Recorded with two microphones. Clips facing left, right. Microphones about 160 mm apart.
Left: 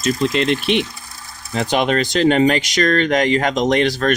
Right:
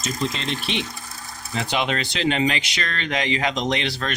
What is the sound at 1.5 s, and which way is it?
Speech, 45° left (ahead or behind).